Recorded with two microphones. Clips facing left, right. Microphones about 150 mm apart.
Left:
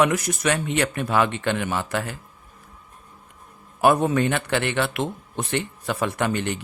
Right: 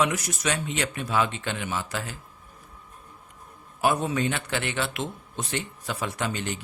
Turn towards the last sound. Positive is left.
turn(degrees=60)  # may be behind; listen again after turning